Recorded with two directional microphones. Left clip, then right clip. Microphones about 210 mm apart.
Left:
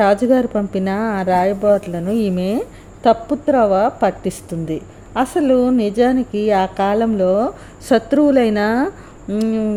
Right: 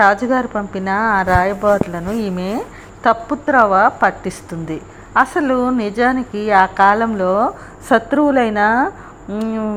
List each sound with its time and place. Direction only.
0.0 s speech: 35° left (ahead or behind)